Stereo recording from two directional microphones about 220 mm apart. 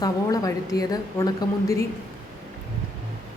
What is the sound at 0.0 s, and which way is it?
A woman's voice, 15° left (ahead or behind).